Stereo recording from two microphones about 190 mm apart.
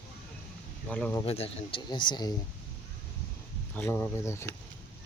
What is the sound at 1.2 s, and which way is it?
Speech, 30° left (ahead or behind).